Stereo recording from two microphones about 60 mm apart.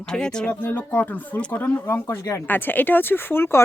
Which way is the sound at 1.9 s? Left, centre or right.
Left.